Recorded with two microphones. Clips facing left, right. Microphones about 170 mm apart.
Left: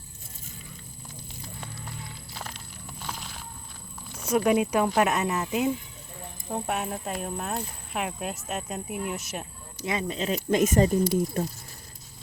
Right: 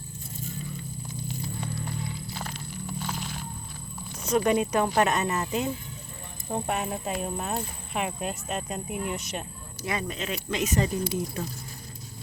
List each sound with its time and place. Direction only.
2.3 s music: centre (ahead or behind)
4.2 s speech: 5° left (ahead or behind)
9.8 s speech: 20° left (ahead or behind)
10.2 s speech: 40° left (ahead or behind)